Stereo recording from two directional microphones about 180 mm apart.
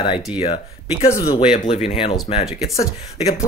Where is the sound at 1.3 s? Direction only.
25° left (ahead or behind).